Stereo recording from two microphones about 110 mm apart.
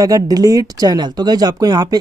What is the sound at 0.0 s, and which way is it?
Speech, 35° right (ahead or behind).